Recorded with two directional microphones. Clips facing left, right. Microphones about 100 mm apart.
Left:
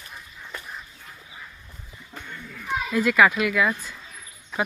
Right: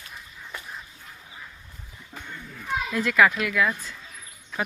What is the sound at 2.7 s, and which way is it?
A child's voice, 5° left (ahead or behind).